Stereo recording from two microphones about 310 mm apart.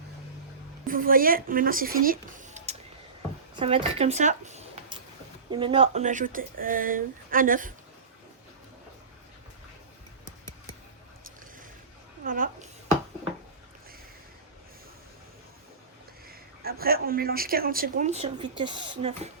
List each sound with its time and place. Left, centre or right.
0.9 s speech: right
12.2 s a sound: right
16.3 s speech: right